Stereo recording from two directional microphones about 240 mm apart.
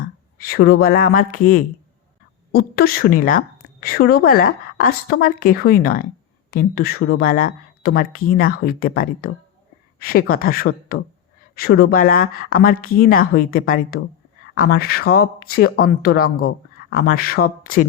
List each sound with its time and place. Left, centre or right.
0.3 s a woman's voice: left
10.9 s speech: left
11.5 s a woman's voice: left